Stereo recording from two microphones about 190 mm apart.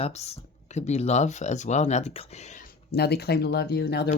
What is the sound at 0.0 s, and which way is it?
Speech, 35° left (ahead or behind).